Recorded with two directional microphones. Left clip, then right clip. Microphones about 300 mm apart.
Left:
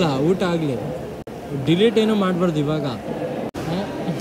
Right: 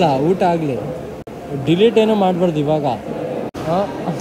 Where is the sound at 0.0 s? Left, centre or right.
Centre.